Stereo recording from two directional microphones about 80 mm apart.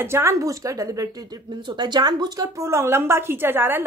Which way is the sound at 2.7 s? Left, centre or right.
Right.